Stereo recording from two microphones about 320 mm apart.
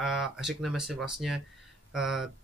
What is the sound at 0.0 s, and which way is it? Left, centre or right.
Speech, centre.